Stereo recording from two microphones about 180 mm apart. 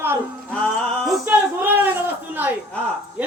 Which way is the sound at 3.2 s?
10° right (ahead or behind).